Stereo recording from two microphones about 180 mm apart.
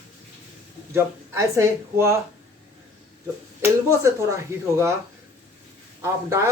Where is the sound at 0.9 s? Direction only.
15° right (ahead or behind).